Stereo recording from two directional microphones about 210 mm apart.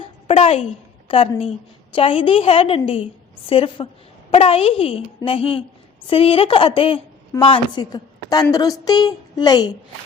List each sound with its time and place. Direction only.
0.0 s a woman's voice: 30° left (ahead or behind)